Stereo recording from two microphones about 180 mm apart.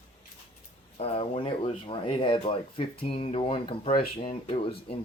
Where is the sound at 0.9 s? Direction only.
35° left (ahead or behind).